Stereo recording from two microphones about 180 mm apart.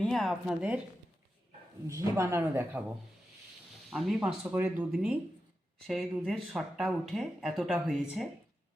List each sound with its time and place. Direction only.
0.0 s speech: 5° left (ahead or behind)
1.9 s speech: 15° right (ahead or behind)
3.8 s speech: centre (ahead or behind)